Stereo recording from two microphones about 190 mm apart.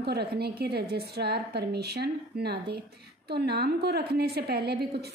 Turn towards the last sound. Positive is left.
turn(degrees=-55)  # may be behind; listen again after turning